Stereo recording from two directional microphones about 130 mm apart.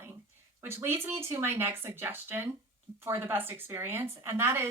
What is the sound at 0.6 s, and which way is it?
A woman's voice, 20° right (ahead or behind).